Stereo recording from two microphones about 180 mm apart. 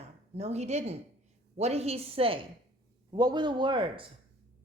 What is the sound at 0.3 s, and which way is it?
A woman's voice, 35° right (ahead or behind).